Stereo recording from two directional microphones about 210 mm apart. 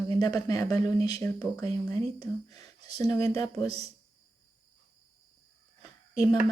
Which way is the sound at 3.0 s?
15° left (ahead or behind).